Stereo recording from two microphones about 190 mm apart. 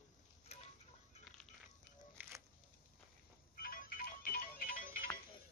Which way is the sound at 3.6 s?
45° left (ahead or behind).